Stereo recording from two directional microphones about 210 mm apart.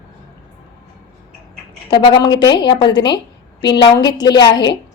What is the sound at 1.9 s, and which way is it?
A woman's voice, 20° left (ahead or behind).